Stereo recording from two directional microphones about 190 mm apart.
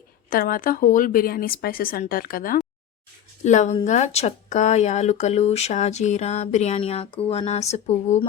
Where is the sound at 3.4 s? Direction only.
40° left (ahead or behind).